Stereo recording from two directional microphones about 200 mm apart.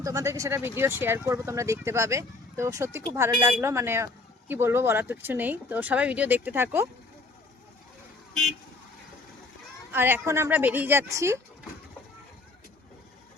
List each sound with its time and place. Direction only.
0.0 s speech: 15° right (ahead or behind)
9.9 s speech: 10° right (ahead or behind)